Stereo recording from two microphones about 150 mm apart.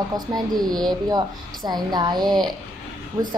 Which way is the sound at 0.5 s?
25° right (ahead or behind).